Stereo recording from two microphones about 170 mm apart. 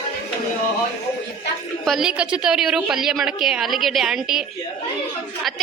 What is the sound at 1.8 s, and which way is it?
A woman's voice, centre (ahead or behind).